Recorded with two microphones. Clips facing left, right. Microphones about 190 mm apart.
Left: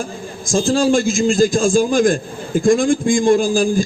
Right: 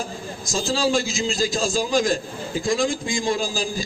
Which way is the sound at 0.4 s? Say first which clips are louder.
Left 8 dB; 50° left (ahead or behind).